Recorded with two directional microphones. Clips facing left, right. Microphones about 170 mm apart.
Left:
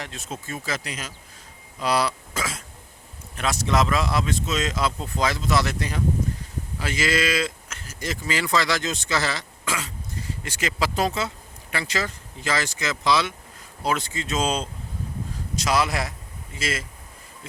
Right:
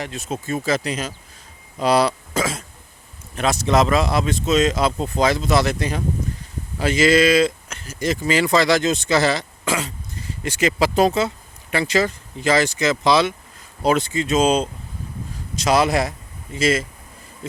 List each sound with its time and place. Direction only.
0.0 s speech: 10° right (ahead or behind)
0.4 s speech: 25° right (ahead or behind)